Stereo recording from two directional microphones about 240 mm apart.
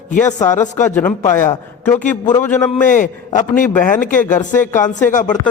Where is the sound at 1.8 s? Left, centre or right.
Centre.